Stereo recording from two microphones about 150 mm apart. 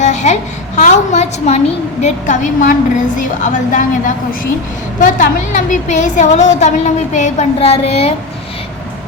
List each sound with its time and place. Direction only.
0.0 s a child's voice: 50° left (ahead or behind)